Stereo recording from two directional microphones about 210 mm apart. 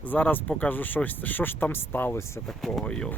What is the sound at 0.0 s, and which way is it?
Speech, 5° left (ahead or behind).